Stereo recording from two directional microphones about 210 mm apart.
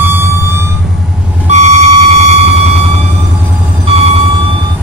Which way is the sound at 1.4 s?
30° right (ahead or behind).